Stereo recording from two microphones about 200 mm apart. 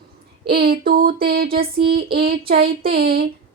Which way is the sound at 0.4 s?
50° right (ahead or behind).